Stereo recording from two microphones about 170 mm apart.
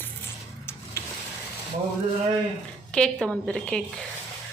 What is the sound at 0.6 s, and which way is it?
Printer, 15° left (ahead or behind).